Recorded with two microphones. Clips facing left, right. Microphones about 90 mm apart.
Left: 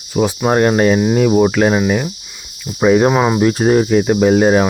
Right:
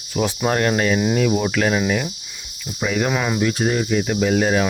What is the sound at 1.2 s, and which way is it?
Speech, 30° left (ahead or behind).